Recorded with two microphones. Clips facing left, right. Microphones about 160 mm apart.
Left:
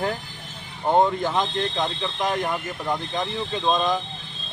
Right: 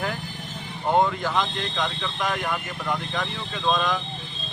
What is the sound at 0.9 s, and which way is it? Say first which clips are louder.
Speech: left 2 dB; 25° left (ahead or behind).